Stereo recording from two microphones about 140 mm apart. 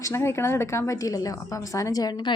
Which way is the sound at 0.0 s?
20° left (ahead or behind).